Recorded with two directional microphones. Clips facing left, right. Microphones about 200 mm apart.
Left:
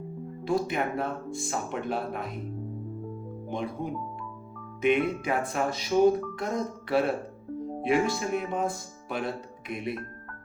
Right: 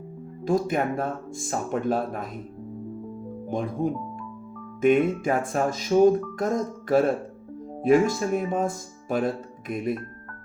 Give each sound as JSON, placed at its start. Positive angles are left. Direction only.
{"t": 0.4, "sound": "speech", "side_deg": -45}
{"t": 3.5, "sound": "speech", "side_deg": -45}